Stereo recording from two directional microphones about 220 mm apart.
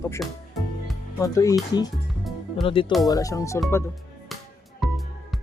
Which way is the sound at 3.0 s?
15° left (ahead or behind).